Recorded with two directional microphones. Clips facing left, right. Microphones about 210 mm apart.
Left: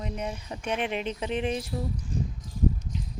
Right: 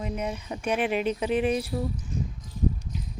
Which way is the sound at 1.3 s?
25° left (ahead or behind).